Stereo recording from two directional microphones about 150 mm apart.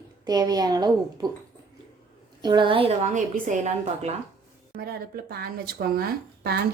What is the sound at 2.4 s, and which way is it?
A woman's voice, 30° right (ahead or behind).